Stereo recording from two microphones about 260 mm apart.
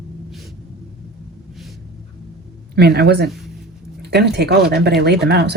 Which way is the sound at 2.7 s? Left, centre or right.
Right.